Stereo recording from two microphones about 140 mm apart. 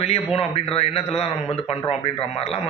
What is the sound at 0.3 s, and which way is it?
A man's voice, 45° left (ahead or behind).